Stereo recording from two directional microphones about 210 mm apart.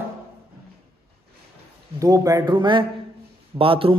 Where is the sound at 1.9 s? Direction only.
15° right (ahead or behind).